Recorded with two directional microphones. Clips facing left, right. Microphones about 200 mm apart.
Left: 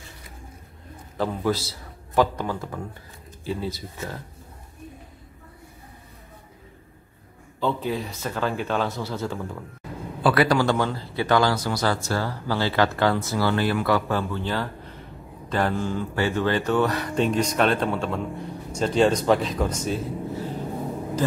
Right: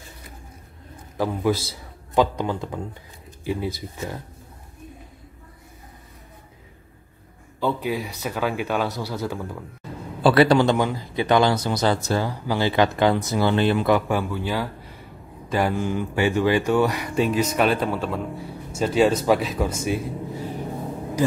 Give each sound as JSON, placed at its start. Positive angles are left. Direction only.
{"t": 1.1, "sound": "a man's voice", "side_deg": -10}
{"t": 7.6, "sound": "speech", "side_deg": -10}
{"t": 9.2, "sound": "speech", "side_deg": -5}
{"t": 10.2, "sound": "speech", "side_deg": -30}